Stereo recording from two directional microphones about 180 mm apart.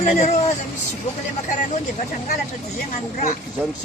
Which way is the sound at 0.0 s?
40° left (ahead or behind).